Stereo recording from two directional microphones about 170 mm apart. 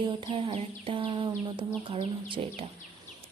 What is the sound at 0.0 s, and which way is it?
Speech, 30° right (ahead or behind).